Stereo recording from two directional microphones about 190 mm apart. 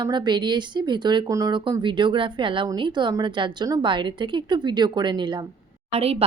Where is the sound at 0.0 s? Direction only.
25° right (ahead or behind).